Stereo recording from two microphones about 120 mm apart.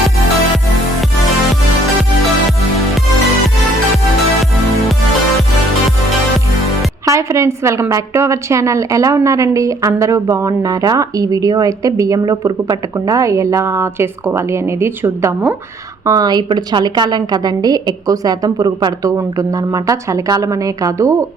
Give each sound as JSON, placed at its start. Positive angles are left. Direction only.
{"t": 7.0, "sound": "a woman's voice", "side_deg": -25}